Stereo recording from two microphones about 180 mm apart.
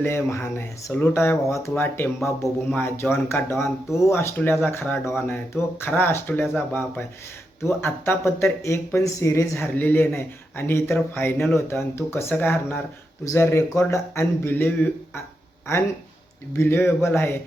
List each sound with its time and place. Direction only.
0.0 s speech: 15° left (ahead or behind)
3.5 s speech: centre (ahead or behind)
3.9 s speech: 15° left (ahead or behind)
16.5 s speech: 15° left (ahead or behind)